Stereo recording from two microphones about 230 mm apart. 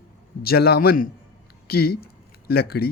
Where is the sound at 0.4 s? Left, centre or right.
Left.